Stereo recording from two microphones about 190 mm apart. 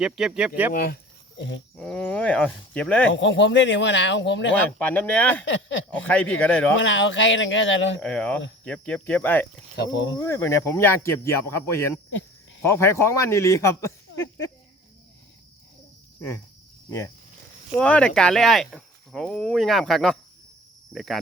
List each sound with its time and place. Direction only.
0.0 s speech: 5° right (ahead or behind)
0.7 s speech: 50° left (ahead or behind)
1.8 s speech: 5° left (ahead or behind)
3.1 s speech: 75° left (ahead or behind)
4.8 s speech: 10° left (ahead or behind)
5.5 s speech: 70° left (ahead or behind)
6.0 s speech: 5° left (ahead or behind)
6.8 s speech: 80° left
8.0 s speech: 5° left (ahead or behind)
9.7 s speech: 70° left (ahead or behind)
10.2 s speech: 15° left (ahead or behind)
17.7 s speech: 5° left (ahead or behind)